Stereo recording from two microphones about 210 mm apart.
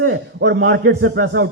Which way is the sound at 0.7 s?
65° right (ahead or behind).